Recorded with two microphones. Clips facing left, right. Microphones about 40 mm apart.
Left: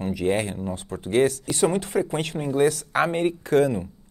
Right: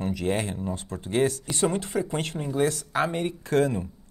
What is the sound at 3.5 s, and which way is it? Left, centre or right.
Speech, centre.